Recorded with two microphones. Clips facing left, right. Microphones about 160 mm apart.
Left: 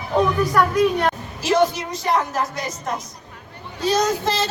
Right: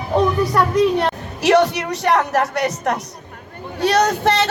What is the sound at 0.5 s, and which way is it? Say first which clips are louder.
Speech: right 1 dB; 25° right (ahead or behind).